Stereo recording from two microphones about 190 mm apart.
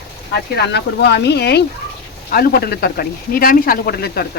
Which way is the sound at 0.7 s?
60° left (ahead or behind).